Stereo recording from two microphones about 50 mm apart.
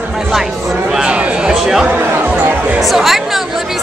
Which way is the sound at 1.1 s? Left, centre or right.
Right.